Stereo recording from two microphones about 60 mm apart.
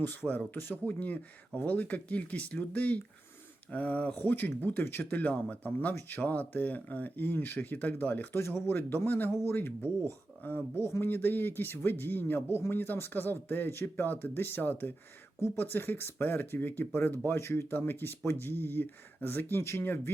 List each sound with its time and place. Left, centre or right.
0.0 s speech: left
0.9 s speech: left
8.4 s speech: left
8.7 s speech: left
17.3 s speech: left